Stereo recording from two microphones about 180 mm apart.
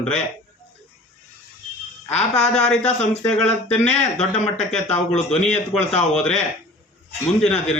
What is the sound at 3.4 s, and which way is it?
Speech, 40° left (ahead or behind).